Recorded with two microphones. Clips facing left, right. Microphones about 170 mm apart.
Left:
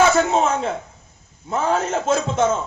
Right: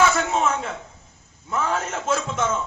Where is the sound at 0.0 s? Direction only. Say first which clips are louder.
Left 4 dB; 35° left (ahead or behind).